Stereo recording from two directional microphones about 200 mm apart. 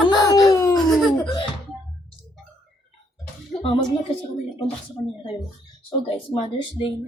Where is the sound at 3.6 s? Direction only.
20° left (ahead or behind).